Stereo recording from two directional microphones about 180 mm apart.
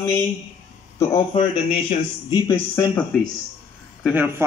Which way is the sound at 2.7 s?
10° left (ahead or behind).